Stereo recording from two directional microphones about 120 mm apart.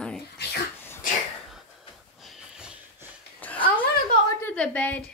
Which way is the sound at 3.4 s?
15° left (ahead or behind).